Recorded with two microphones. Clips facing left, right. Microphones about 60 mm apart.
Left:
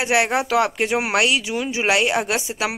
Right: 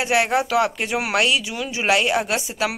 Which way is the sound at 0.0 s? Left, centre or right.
Left.